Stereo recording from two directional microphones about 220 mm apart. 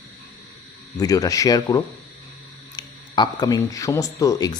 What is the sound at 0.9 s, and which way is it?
A man's voice, 15° left (ahead or behind).